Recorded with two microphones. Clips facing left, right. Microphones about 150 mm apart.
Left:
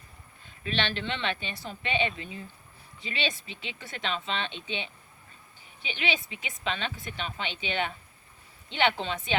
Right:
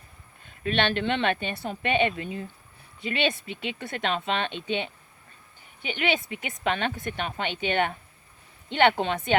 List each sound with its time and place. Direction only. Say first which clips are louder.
0.4 s a woman's voice: right 6 dB; 55° right (ahead or behind)